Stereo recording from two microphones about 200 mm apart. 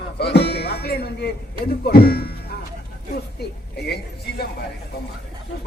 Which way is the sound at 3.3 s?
55° left (ahead or behind).